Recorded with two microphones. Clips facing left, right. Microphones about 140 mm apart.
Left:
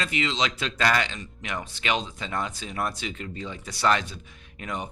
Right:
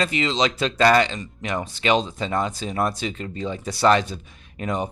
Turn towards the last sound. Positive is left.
turn(degrees=-35)  # may be behind; listen again after turning